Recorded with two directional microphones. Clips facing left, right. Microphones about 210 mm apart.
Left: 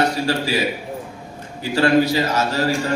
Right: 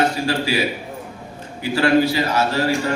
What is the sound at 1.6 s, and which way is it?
A man's voice, 40° left (ahead or behind).